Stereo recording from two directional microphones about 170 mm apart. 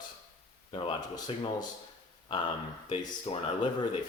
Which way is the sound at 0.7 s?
30° left (ahead or behind).